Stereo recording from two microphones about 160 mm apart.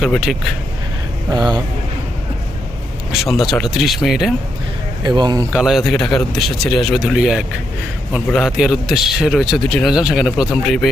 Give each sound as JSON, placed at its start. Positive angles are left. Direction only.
{"t": 0.0, "sound": "a man's voice", "side_deg": 0}
{"t": 3.1, "sound": "a man's voice", "side_deg": 0}
{"t": 5.0, "sound": "speech", "side_deg": -25}
{"t": 5.5, "sound": "a man's voice", "side_deg": -5}